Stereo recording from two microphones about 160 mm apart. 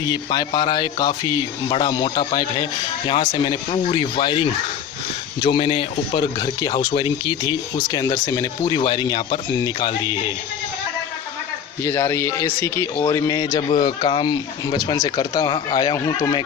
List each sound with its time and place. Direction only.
0.0 s speech: 25° left (ahead or behind)
11.8 s a man's voice: 15° left (ahead or behind)